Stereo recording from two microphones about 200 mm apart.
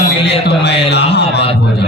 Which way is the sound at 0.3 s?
55° left (ahead or behind).